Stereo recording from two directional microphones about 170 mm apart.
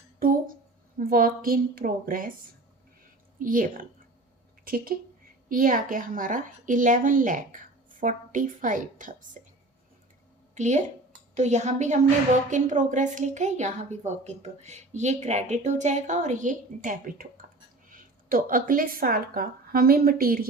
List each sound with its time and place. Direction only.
0.2 s a sound: 55° right (ahead or behind)
0.9 s a woman's voice: 55° right (ahead or behind)
3.3 s a woman's voice: 50° right (ahead or behind)
9.4 s whispering: 50° right (ahead or behind)
10.5 s a woman's voice: 45° right (ahead or behind); by 20.5 s 60° right (ahead or behind)